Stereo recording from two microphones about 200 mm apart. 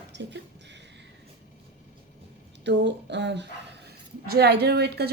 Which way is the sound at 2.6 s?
60° right (ahead or behind).